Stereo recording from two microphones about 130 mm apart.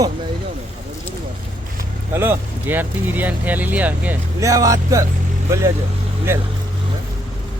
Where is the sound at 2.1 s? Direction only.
20° right (ahead or behind).